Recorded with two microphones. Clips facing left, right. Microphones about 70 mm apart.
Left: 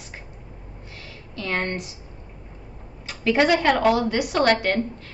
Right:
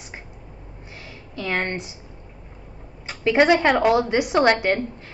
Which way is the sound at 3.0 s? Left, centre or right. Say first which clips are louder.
Right 3 dB; right.